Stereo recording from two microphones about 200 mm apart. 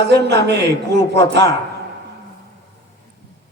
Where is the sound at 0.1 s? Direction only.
60° right (ahead or behind).